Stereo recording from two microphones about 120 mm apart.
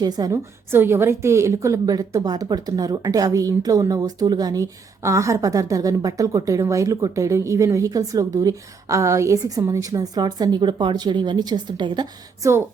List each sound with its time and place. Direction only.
0.0 s a woman's voice: 30° right (ahead or behind)
0.7 s a woman's voice: 20° right (ahead or behind); by 12.5 s 35° right (ahead or behind)